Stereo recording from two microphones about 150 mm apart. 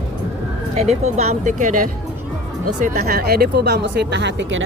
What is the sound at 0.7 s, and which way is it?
Speech, 45° right (ahead or behind).